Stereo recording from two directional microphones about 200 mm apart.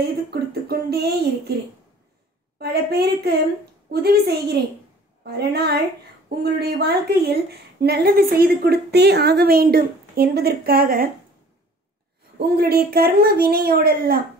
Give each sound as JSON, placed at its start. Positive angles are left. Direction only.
{"t": 0.3, "sound": "a woman's voice", "side_deg": -50}
{"t": 2.6, "sound": "a woman's voice", "side_deg": -55}
{"t": 12.4, "sound": "a woman's voice", "side_deg": -50}